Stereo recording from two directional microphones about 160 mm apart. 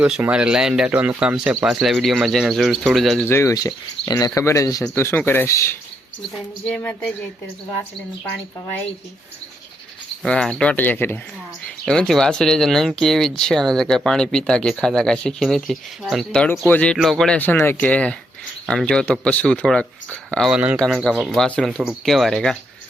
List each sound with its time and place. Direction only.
0.0 s speech: 5° right (ahead or behind)
3.2 s speech: 15° left (ahead or behind)
10.2 s speech: 5° left (ahead or behind)